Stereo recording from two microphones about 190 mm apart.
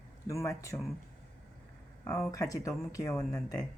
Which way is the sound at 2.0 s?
15° left (ahead or behind).